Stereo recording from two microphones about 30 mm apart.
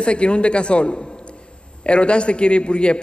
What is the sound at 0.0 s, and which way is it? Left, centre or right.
A man's voice, left.